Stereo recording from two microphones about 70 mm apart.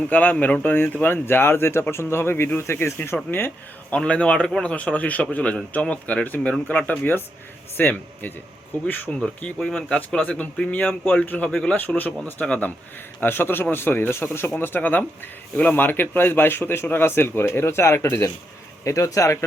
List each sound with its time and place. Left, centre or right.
0.1 s speech: left
3.9 s a man's voice: centre
9.1 s a man's voice: centre
13.1 s speech: left